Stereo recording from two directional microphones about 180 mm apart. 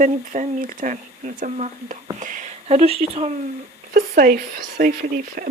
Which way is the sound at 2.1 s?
45° right (ahead or behind).